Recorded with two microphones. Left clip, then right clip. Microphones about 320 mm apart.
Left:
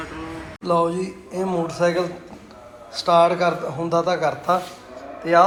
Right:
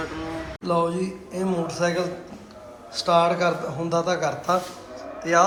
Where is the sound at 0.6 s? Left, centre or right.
Centre.